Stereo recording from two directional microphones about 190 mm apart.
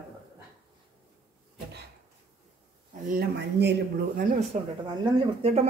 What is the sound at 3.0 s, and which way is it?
Speech, 50° right (ahead or behind).